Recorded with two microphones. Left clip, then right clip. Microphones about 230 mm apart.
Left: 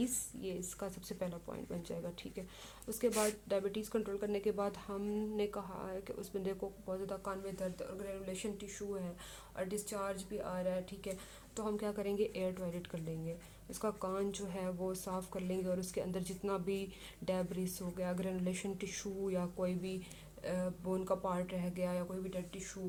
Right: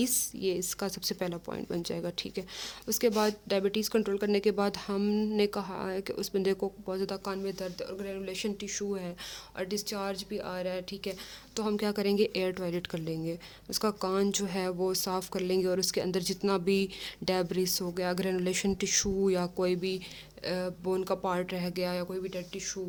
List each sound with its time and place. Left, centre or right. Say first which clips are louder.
0.0 s speech: right 10 dB; right